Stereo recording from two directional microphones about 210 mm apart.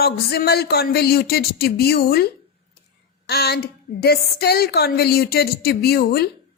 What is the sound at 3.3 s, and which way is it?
A woman's voice, 50° left (ahead or behind).